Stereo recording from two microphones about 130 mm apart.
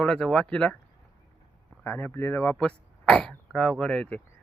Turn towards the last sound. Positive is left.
turn(degrees=10)  # may be behind; listen again after turning